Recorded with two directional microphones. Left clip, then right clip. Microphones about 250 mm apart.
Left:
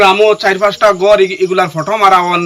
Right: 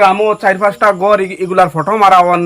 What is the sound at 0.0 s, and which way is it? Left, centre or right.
A man's voice, centre.